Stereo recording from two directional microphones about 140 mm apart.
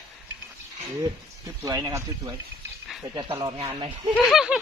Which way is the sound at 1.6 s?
25° right (ahead or behind).